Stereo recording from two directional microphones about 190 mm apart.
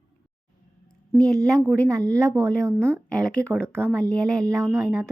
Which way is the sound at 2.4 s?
20° right (ahead or behind).